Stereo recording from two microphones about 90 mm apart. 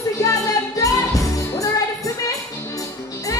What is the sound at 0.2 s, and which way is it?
Music, 35° left (ahead or behind).